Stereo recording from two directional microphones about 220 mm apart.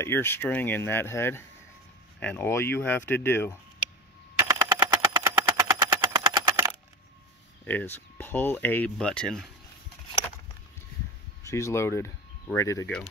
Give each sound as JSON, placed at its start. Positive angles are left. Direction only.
{"t": 0.0, "sound": "speech", "side_deg": 10}
{"t": 4.5, "sound": "a sound", "side_deg": -20}
{"t": 7.6, "sound": "speech", "side_deg": 10}
{"t": 11.4, "sound": "speech", "side_deg": 15}